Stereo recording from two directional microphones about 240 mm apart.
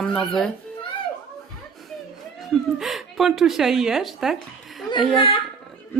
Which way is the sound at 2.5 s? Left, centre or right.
Centre.